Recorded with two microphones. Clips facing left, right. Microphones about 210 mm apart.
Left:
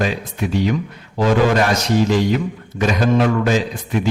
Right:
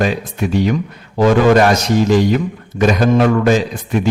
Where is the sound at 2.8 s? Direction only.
50° right (ahead or behind).